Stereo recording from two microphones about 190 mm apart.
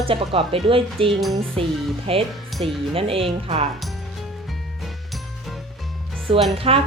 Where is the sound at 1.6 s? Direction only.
30° right (ahead or behind).